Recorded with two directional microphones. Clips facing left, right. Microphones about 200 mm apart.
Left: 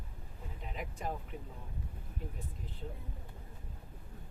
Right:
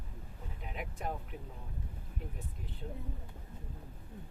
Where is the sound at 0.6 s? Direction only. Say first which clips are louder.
Even; centre (ahead or behind).